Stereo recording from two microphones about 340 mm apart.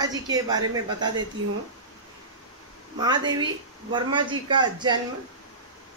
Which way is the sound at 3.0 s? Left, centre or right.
Centre.